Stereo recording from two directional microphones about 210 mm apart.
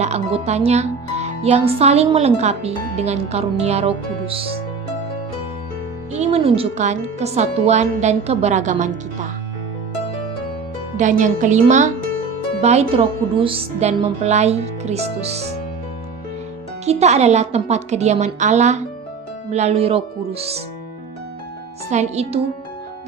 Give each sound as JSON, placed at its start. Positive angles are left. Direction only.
{"t": 0.0, "sound": "a child's voice", "side_deg": -30}
{"t": 6.1, "sound": "a child's voice", "side_deg": -30}
{"t": 10.9, "sound": "a child's voice", "side_deg": -35}
{"t": 16.8, "sound": "a child's voice", "side_deg": -30}
{"t": 21.8, "sound": "a child's voice", "side_deg": -30}